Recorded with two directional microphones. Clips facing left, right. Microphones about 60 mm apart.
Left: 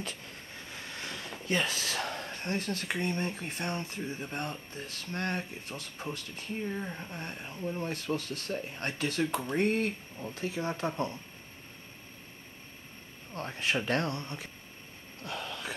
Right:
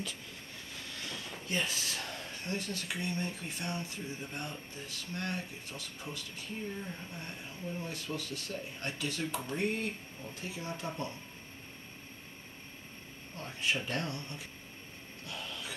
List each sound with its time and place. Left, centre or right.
0.8 s vehicle: left
1.5 s speech: left
2.4 s speech: left
13.3 s speech: left
15.2 s a sound: left